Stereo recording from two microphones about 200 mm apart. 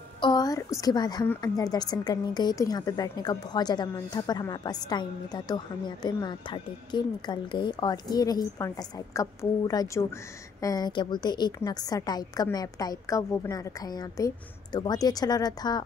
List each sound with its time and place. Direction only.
0.2 s a woman's voice: 20° left (ahead or behind)